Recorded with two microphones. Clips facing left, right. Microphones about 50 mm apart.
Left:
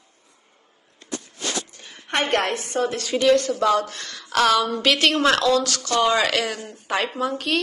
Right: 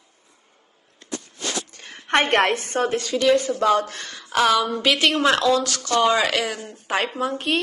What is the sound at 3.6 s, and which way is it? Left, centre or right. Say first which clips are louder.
Speech: right 1 dB; right.